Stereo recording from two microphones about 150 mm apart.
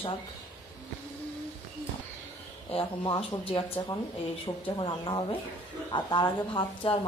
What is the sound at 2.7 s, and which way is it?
Speech, 35° left (ahead or behind).